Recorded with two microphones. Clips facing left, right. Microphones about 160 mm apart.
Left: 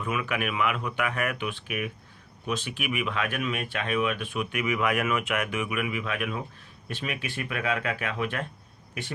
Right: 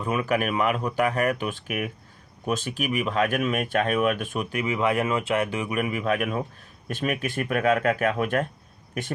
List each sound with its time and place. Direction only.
0.0 s speech: 35° right (ahead or behind)